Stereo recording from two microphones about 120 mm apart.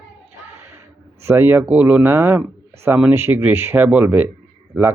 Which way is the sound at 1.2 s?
20° right (ahead or behind).